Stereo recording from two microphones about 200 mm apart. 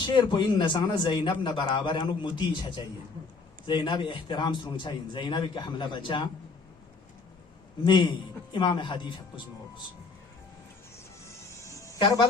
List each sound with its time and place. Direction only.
0.0 s a man's voice: 20° left (ahead or behind)
7.9 s a man's voice: 25° left (ahead or behind)
11.3 s music: 15° left (ahead or behind)